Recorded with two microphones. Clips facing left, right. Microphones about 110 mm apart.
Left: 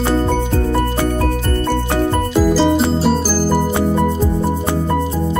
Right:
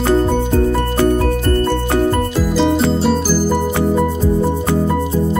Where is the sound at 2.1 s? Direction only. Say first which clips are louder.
Left 2 dB; centre (ahead or behind).